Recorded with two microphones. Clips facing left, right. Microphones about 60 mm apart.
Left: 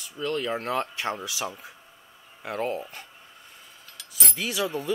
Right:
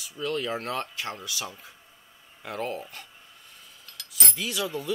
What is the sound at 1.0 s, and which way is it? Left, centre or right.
Speech, centre.